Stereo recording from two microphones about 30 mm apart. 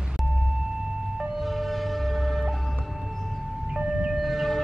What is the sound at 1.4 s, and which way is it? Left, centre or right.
Vehicle, centre.